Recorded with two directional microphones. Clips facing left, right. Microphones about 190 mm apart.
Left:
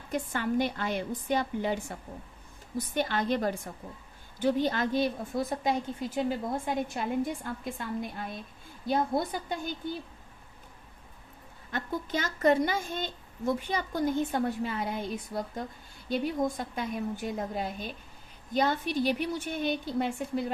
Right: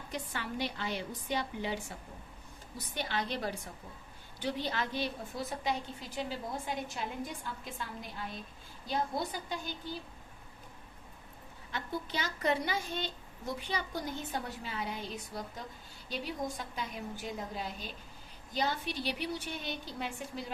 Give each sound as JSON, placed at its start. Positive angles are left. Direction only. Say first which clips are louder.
{"t": 0.1, "sound": "a woman's voice", "louder": "left 10 dB", "side_deg": 50}
{"t": 8.9, "sound": "a woman's voice", "louder": "left 6 dB", "side_deg": 55}
{"t": 11.7, "sound": "a woman's voice", "louder": "left 5 dB", "side_deg": 50}